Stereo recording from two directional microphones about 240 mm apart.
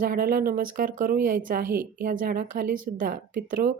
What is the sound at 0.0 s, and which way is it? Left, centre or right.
Speech, right.